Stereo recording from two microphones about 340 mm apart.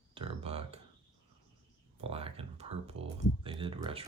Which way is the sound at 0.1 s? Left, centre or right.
Centre.